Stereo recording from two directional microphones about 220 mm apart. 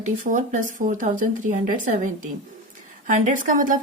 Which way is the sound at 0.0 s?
35° right (ahead or behind).